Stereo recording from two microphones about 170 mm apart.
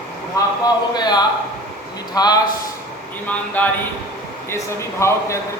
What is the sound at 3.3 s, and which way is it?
Speech, 10° left (ahead or behind).